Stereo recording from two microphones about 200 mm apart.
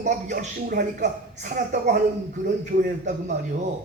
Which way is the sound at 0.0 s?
40° right (ahead or behind).